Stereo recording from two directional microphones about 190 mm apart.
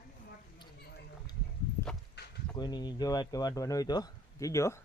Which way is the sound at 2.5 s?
20° left (ahead or behind).